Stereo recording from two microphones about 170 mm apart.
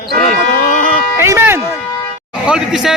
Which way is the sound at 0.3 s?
45° left (ahead or behind).